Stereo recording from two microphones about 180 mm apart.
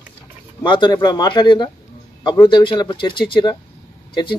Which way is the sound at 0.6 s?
25° left (ahead or behind).